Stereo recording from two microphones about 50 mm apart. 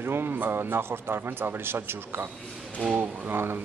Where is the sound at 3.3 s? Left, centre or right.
Right.